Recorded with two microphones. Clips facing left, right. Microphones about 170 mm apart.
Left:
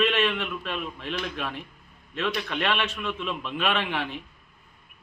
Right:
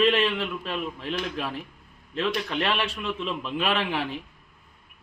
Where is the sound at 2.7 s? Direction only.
35° right (ahead or behind).